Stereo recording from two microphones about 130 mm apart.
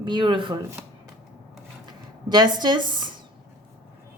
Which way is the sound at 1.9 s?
35° right (ahead or behind).